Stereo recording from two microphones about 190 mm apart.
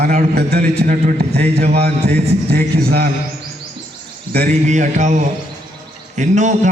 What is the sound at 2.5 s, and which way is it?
Speech, 55° right (ahead or behind).